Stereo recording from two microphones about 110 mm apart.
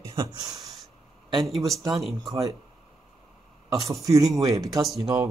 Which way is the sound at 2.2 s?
30° right (ahead or behind).